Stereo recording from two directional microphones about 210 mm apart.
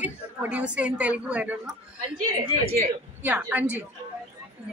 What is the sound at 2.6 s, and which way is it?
Speech, 30° right (ahead or behind).